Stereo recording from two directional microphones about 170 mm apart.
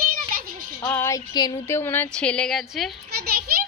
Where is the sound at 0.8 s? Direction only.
15° left (ahead or behind).